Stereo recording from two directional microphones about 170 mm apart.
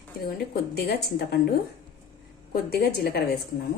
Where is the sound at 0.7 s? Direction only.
70° left (ahead or behind).